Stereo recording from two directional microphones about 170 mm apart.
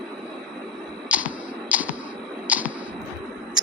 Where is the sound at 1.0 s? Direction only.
10° right (ahead or behind).